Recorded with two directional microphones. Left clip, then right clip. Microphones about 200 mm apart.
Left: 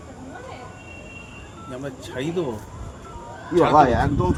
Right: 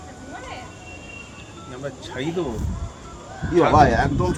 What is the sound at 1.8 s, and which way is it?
Speech, 25° left (ahead or behind).